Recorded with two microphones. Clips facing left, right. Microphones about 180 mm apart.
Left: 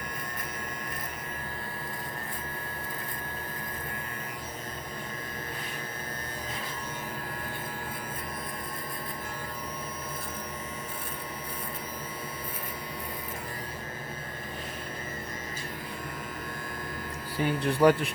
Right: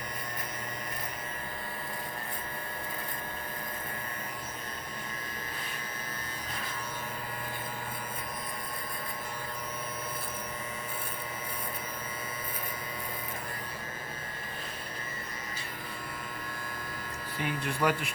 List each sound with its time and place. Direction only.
17.3 s speech: 35° left (ahead or behind)